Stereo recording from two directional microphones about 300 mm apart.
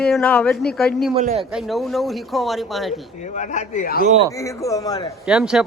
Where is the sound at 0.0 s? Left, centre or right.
Centre.